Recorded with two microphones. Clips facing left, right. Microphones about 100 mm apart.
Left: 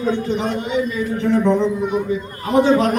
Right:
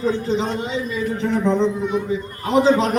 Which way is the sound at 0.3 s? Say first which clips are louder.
Left 1 dB; 25° right (ahead or behind).